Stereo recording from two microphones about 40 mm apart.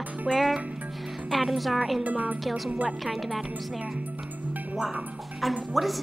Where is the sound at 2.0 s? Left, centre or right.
Right.